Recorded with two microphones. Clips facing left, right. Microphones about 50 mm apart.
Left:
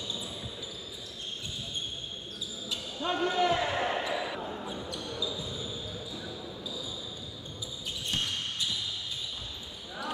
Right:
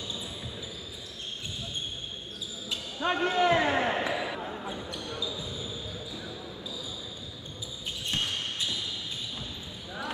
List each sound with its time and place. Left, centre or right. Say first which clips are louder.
2.7 s basketball bounce: right 3 dB; right
4.1 s basketball bounce: right 1 dB; centre
8.1 s basketball bounce: right 2 dB; right